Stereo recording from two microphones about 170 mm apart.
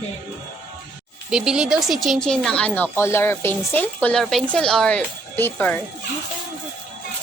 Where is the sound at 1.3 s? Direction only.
5° right (ahead or behind).